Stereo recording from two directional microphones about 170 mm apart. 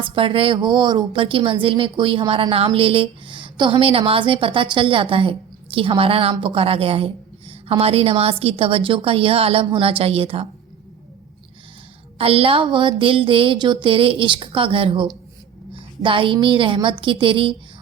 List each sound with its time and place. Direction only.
0.0 s a woman's voice: 30° right (ahead or behind)
12.1 s a woman's voice: 35° right (ahead or behind)